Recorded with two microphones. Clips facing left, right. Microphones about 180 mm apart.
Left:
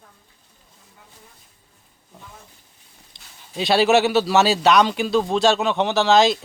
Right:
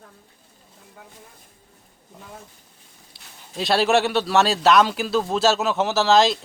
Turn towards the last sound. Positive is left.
turn(degrees=0)  # may be behind; listen again after turning